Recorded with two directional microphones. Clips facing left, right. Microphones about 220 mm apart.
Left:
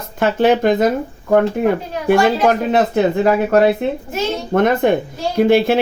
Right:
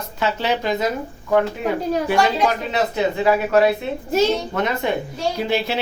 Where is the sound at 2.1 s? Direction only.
50° left (ahead or behind).